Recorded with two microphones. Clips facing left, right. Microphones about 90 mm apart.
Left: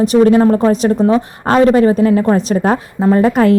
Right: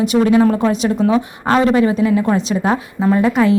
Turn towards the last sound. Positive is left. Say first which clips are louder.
# left 3 dB
turn(degrees=45)  # may be behind; listen again after turning